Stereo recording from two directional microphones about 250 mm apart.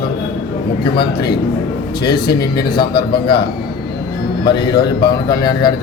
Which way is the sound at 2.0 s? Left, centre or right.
Centre.